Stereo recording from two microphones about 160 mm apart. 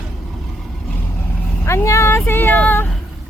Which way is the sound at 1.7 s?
15° left (ahead or behind).